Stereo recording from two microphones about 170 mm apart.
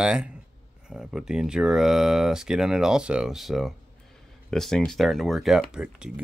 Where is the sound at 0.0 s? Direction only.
5° right (ahead or behind).